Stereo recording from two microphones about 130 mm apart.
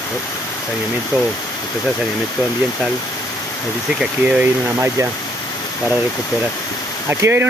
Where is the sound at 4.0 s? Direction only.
10° right (ahead or behind).